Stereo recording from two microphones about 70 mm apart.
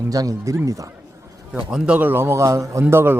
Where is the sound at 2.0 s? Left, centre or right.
Right.